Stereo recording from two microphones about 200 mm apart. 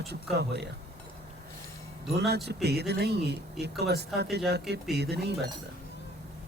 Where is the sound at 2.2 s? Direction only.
55° right (ahead or behind).